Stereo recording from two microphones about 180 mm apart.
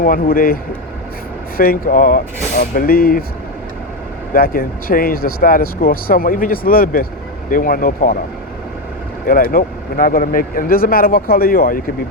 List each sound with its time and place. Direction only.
0.0 s speech: 55° left (ahead or behind)
4.4 s speech: 55° left (ahead or behind)
9.2 s speech: 55° left (ahead or behind)